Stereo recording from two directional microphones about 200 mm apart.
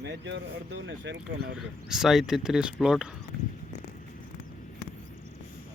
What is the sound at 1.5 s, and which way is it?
Speech, 5° right (ahead or behind).